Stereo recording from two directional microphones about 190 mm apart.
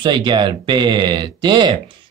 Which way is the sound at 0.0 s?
25° right (ahead or behind).